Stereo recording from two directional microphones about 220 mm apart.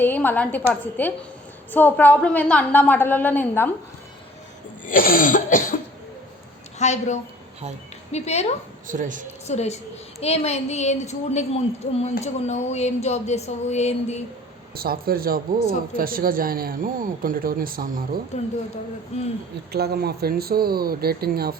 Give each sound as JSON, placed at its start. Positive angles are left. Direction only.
{"t": 0.0, "sound": "a woman's voice", "side_deg": 10}
{"t": 4.9, "sound": "cough", "side_deg": 40}
{"t": 6.7, "sound": "a woman's voice", "side_deg": 30}
{"t": 8.9, "sound": "speech", "side_deg": -35}
{"t": 9.5, "sound": "a woman's voice", "side_deg": 30}
{"t": 14.8, "sound": "speech", "side_deg": -45}
{"t": 18.3, "sound": "cough", "side_deg": 30}
{"t": 19.1, "sound": "a woman's voice", "side_deg": 30}
{"t": 19.7, "sound": "speech", "side_deg": -45}